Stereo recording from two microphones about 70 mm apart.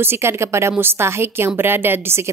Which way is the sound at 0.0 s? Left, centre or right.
Right.